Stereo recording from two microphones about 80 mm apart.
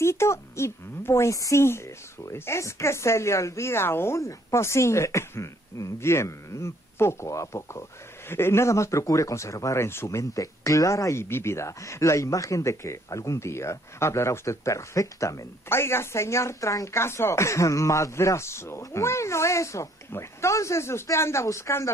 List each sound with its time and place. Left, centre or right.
0.0 s speech: left